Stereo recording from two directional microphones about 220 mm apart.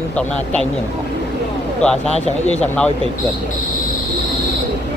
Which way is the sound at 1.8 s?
5° left (ahead or behind).